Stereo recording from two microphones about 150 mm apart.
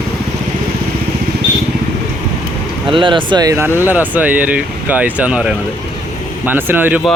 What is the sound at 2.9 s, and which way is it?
Speech, 35° right (ahead or behind).